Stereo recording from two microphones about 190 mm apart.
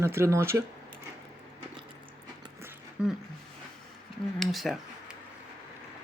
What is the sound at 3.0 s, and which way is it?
Speech, 5° right (ahead or behind).